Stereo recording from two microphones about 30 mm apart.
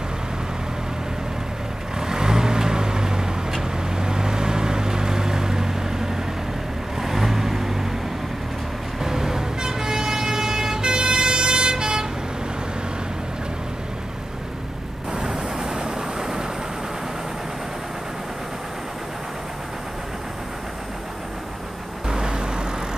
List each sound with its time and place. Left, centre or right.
2.0 s vehicle: right
9.0 s vehicle: centre
15.5 s vehicle: right
22.0 s vehicle: right